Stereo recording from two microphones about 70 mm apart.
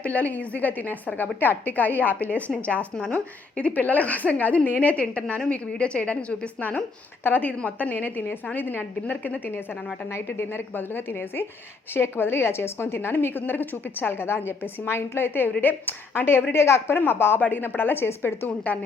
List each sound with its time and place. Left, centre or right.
0.0 s a woman's voice: left
10.1 s a woman's voice: left